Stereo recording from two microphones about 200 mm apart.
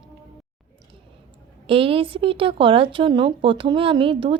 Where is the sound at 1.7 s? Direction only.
25° right (ahead or behind).